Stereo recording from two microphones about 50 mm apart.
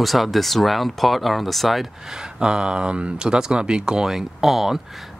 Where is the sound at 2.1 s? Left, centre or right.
Centre.